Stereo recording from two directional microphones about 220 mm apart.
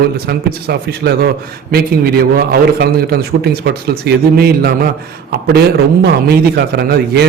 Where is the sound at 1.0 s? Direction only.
50° right (ahead or behind).